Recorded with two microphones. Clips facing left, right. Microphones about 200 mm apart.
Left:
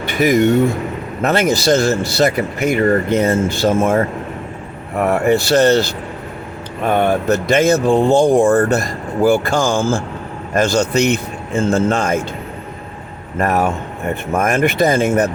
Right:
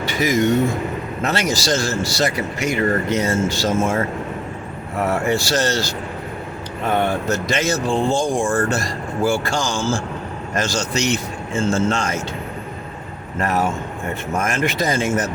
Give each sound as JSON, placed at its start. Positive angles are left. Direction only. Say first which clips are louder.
{"t": 0.1, "sound": "speech", "louder": "left 5 dB", "side_deg": 60}
{"t": 4.9, "sound": "speech", "louder": "left 5 dB", "side_deg": 60}
{"t": 6.8, "sound": "speech", "louder": "left 5 dB", "side_deg": 60}
{"t": 13.4, "sound": "speech", "louder": "left 4 dB", "side_deg": 60}